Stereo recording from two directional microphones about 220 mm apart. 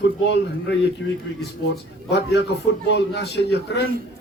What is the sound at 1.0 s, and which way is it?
A man's voice, 55° left (ahead or behind).